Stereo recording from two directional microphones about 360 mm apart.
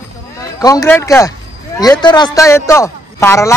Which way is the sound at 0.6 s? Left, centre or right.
Centre.